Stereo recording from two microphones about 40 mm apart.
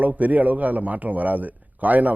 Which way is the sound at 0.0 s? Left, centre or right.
Right.